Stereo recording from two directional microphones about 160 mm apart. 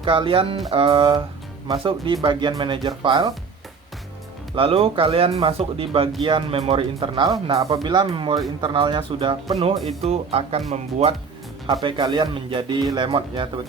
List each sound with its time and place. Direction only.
0.0 s speech: 30° right (ahead or behind)
4.5 s speech: 35° right (ahead or behind)
11.8 s speech: 30° right (ahead or behind)